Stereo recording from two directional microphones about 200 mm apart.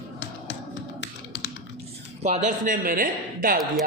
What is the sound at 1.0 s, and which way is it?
Typing, 65° left (ahead or behind).